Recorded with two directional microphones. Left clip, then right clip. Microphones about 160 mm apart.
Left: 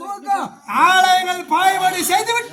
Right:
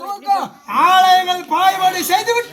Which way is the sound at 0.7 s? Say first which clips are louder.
Right 2 dB; 10° left (ahead or behind).